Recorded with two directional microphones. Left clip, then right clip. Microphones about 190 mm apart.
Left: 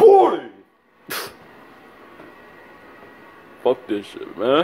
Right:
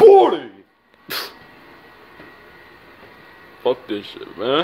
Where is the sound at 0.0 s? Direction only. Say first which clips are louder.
Right 2 dB; 20° right (ahead or behind).